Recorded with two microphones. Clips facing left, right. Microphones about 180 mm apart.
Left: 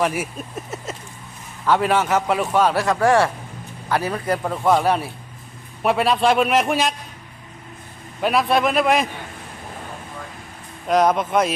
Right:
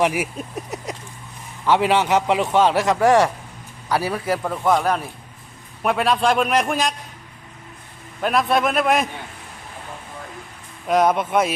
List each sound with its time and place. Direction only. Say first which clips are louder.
0.0 s a man's voice: right 2 dB; 15° right (ahead or behind)
4.4 s a man's voice: left 2 dB; 5° left (ahead or behind)
8.2 s a man's voice: left 1 dB; 5° left (ahead or behind)
10.8 s a man's voice: even; 5° right (ahead or behind)